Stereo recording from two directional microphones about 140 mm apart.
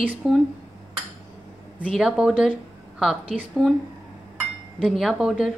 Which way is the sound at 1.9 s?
5° right (ahead or behind).